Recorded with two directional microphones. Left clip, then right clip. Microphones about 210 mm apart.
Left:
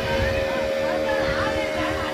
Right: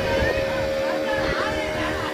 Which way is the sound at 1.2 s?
30° left (ahead or behind).